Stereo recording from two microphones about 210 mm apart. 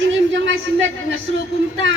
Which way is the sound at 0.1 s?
60° right (ahead or behind).